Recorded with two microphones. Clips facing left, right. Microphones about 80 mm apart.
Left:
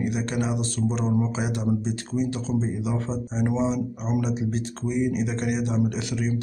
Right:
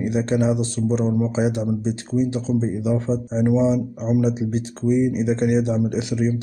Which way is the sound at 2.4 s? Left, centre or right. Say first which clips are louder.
Right 5 dB; right.